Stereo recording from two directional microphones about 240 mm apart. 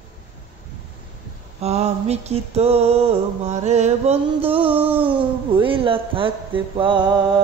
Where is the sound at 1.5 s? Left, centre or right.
Right.